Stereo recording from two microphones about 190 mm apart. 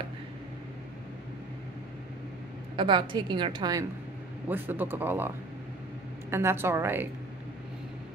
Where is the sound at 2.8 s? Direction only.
25° right (ahead or behind).